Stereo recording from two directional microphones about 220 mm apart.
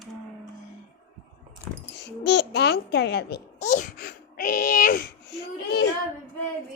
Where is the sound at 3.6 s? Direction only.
35° left (ahead or behind).